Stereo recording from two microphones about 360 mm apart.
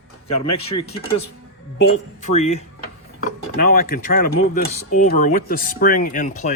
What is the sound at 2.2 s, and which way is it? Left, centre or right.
Speech, centre.